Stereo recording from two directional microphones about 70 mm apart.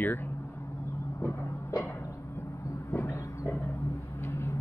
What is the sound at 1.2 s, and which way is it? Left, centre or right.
Music, left.